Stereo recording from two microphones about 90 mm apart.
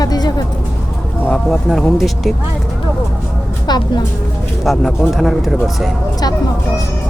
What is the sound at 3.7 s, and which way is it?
Speech, 50° left (ahead or behind).